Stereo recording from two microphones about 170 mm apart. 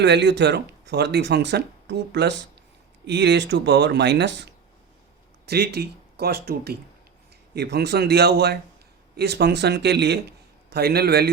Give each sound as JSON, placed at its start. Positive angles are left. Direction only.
{"t": 0.0, "sound": "speech", "side_deg": -90}
{"t": 5.5, "sound": "a man's voice", "side_deg": -70}